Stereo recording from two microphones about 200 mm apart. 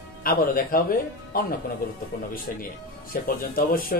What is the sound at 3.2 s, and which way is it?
Speech, 45° left (ahead or behind).